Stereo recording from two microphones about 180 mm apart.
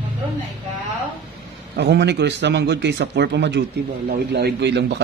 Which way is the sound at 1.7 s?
70° right (ahead or behind).